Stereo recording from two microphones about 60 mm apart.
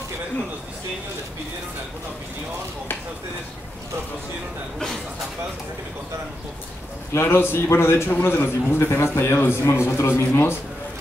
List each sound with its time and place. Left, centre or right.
7.1 s a man's voice: left